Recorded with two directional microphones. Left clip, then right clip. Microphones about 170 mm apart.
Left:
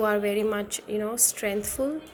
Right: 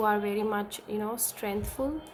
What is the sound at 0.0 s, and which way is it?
A woman's voice, centre (ahead or behind).